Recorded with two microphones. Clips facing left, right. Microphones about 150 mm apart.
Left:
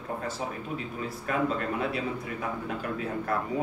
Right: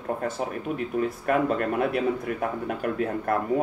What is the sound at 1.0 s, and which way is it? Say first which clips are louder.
Speech: right 6 dB; 55° right (ahead or behind).